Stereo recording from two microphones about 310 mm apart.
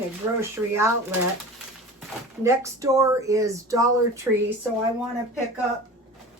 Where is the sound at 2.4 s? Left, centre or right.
Centre.